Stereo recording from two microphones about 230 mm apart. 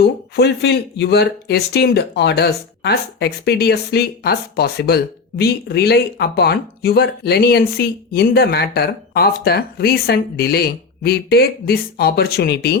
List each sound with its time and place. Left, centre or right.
0.0 s speech: left